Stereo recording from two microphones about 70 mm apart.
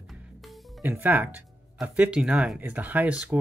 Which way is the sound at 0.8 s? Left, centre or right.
Right.